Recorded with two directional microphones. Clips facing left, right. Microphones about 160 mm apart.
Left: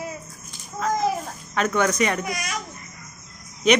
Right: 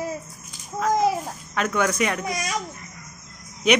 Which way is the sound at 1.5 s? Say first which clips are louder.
Left 2 dB; 5° right (ahead or behind).